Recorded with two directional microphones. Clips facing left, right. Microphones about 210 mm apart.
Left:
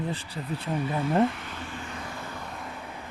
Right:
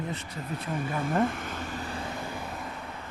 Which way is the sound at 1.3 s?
45° right (ahead or behind).